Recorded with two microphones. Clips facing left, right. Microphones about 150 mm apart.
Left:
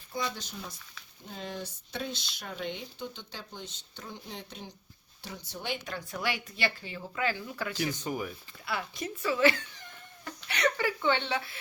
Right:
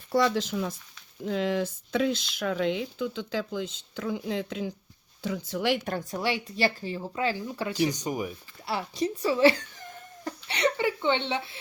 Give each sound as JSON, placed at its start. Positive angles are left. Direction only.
{"t": 0.1, "sound": "speech", "side_deg": -85}
{"t": 5.8, "sound": "speech", "side_deg": -45}
{"t": 6.1, "sound": "speech", "side_deg": -30}
{"t": 7.8, "sound": "speech", "side_deg": -20}
{"t": 8.6, "sound": "speech", "side_deg": -35}
{"t": 10.2, "sound": "a sound", "side_deg": -30}